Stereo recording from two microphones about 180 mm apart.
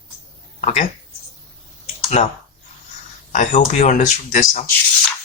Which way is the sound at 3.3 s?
45° left (ahead or behind).